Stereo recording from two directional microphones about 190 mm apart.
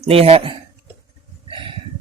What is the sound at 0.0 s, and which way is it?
Speech, 30° right (ahead or behind).